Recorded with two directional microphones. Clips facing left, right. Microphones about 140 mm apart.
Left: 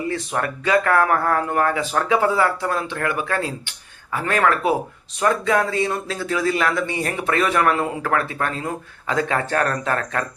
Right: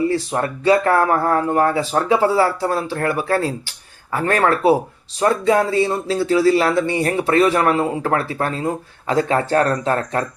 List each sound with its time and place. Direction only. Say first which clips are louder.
0.1 s speech: right 4 dB; 30° right (ahead or behind)